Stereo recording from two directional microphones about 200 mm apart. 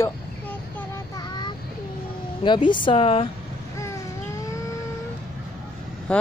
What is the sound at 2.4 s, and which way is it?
Speech, 25° left (ahead or behind).